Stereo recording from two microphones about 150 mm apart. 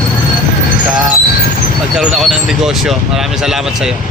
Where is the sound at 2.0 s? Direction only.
5° right (ahead or behind).